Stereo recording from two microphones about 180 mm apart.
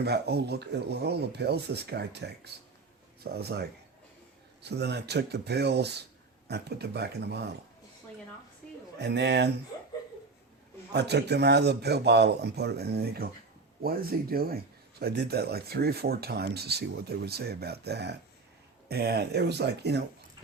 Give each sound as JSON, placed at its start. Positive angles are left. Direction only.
{"t": 0.0, "sound": "speech", "side_deg": -65}
{"t": 9.0, "sound": "speech", "side_deg": -70}
{"t": 10.9, "sound": "speech", "side_deg": -70}